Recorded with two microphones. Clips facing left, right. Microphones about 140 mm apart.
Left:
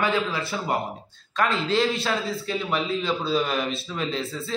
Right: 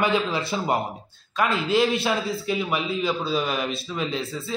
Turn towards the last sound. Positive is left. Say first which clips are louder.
# right 1 dB
turn(degrees=-5)  # may be behind; listen again after turning